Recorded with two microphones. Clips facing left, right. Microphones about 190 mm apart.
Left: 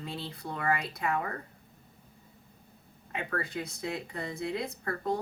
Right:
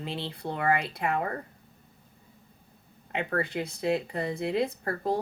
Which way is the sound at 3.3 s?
30° right (ahead or behind).